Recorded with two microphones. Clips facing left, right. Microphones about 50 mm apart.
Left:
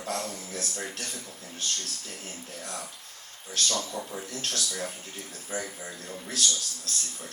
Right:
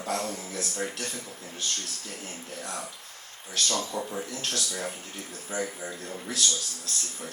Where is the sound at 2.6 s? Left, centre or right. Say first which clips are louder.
Right 2 dB; right.